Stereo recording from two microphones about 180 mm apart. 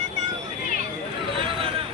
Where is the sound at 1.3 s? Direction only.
30° right (ahead or behind).